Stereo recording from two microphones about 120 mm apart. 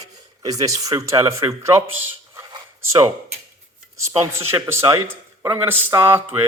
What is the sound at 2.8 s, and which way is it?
Speech, 25° right (ahead or behind).